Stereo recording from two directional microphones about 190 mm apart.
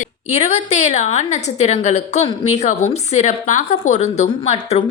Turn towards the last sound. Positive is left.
turn(degrees=35)  # may be behind; listen again after turning